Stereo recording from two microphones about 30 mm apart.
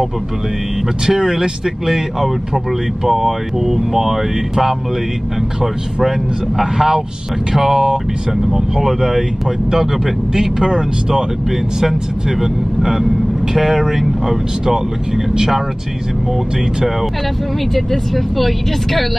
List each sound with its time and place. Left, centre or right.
1.0 s speech: centre
1.9 s speech: centre
6.0 s speech: centre
10.3 s speech: right
17.7 s speech: centre